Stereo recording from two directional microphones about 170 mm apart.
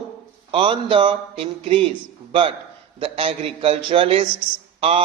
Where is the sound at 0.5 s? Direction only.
30° right (ahead or behind).